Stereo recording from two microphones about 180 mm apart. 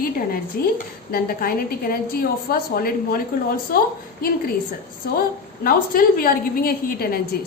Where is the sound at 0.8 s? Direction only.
55° left (ahead or behind).